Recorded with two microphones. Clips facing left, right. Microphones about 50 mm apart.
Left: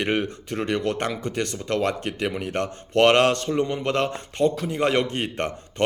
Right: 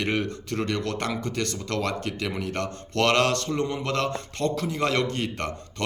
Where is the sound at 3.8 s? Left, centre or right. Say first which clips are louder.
Left 3 dB; centre.